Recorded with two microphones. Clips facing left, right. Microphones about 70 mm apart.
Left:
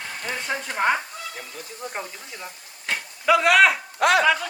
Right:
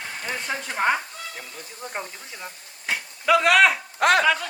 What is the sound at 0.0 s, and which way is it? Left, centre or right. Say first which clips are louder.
Speech: even; centre.